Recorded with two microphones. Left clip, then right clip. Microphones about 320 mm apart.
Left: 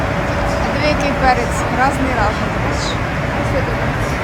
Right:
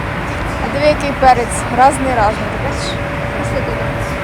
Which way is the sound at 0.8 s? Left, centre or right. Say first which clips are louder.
Right 6 dB; centre.